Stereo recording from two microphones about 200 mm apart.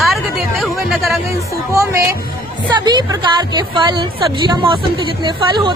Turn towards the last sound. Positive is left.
turn(degrees=-25)  # may be behind; listen again after turning